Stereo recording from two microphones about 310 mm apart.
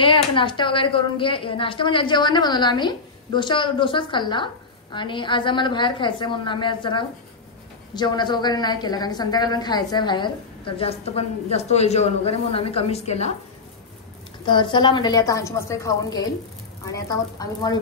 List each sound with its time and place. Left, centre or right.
0.0 s a woman's voice: centre
14.4 s a woman's voice: centre